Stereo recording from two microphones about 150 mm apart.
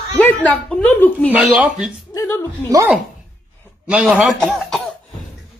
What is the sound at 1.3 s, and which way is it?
Speech, 5° right (ahead or behind).